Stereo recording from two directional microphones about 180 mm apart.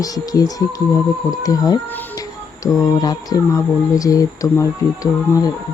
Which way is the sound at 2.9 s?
20° left (ahead or behind).